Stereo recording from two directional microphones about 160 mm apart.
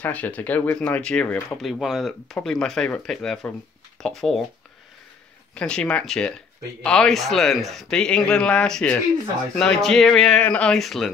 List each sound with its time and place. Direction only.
0.0 s speech: 10° left (ahead or behind)
5.5 s speech: 5° left (ahead or behind)